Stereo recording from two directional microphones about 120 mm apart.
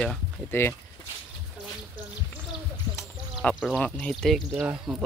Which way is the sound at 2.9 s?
5° left (ahead or behind).